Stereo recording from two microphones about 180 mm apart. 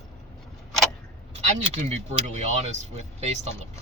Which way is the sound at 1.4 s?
40° right (ahead or behind).